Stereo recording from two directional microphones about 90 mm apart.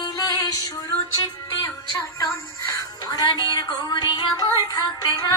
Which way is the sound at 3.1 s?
50° left (ahead or behind).